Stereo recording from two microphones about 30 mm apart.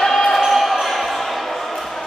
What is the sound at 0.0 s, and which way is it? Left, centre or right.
Basketball bounce, centre.